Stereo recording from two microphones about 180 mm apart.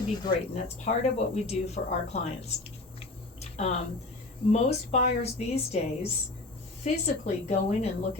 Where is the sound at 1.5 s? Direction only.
35° left (ahead or behind).